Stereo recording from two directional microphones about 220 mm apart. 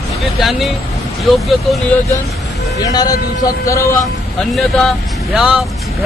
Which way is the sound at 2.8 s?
15° left (ahead or behind).